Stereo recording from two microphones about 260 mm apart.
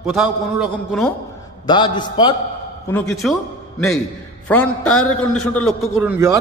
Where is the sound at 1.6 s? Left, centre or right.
Centre.